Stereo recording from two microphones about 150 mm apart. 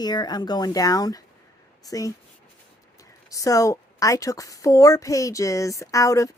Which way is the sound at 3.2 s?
20° left (ahead or behind).